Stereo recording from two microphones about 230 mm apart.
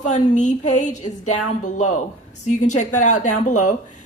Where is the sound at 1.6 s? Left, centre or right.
Left.